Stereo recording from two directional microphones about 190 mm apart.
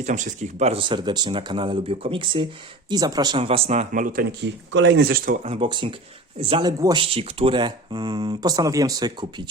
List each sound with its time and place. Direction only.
0.0 s speech: 40° right (ahead or behind)
4.7 s speech: 65° right (ahead or behind); by 7.0 s 20° right (ahead or behind)
7.0 s speech: 30° right (ahead or behind)